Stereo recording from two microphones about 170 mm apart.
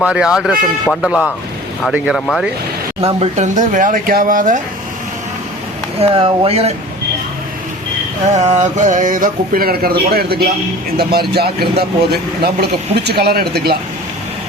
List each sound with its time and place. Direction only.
0.0 s speech: 5° right (ahead or behind)
3.0 s speech: 40° right (ahead or behind)
6.0 s speech: 35° right (ahead or behind)
8.3 s a man's voice: 45° right (ahead or behind); by 13.7 s 65° right (ahead or behind)